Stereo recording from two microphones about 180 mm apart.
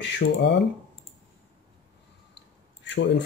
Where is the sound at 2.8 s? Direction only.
85° left.